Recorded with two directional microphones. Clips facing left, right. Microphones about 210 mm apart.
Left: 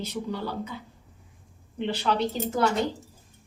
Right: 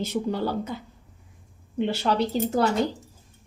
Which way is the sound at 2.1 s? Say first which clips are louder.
Right 1 dB; 40° right (ahead or behind).